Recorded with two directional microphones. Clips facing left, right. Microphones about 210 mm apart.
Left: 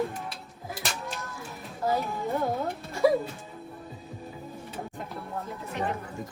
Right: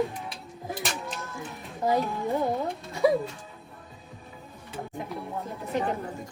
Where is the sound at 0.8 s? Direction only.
Centre (ahead or behind).